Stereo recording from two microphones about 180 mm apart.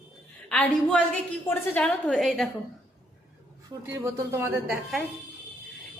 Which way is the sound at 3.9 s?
15° right (ahead or behind).